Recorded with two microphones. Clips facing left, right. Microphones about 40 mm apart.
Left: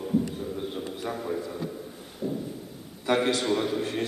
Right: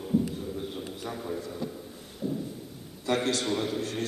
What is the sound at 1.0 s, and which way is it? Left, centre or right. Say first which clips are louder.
Speech: left 4 dB; centre.